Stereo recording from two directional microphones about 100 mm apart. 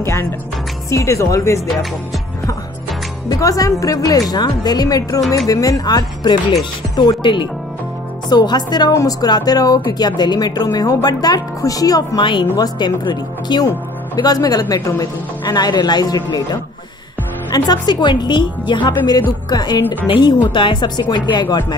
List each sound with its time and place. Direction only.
0.0 s speech: 25° left (ahead or behind)
3.3 s a woman's voice: 35° left (ahead or behind)
12.2 s a woman's voice: 50° left (ahead or behind)